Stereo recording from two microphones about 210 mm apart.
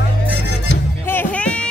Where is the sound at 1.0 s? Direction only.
10° left (ahead or behind).